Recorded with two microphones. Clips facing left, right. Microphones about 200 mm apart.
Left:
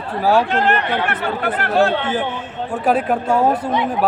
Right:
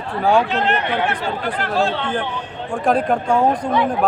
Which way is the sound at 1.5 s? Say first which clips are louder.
Left 5 dB; 65° left (ahead or behind).